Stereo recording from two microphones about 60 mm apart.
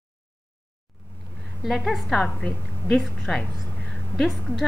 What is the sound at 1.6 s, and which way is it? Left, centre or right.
A woman's voice, centre.